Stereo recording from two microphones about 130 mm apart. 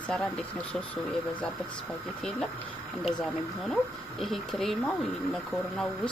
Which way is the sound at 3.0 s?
5° left (ahead or behind).